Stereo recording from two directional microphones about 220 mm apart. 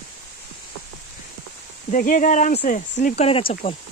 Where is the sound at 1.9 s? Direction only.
35° left (ahead or behind).